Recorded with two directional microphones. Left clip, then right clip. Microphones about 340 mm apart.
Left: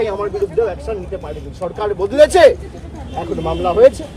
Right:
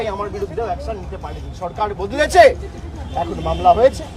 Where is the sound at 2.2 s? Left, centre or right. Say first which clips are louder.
Left 2 dB; centre.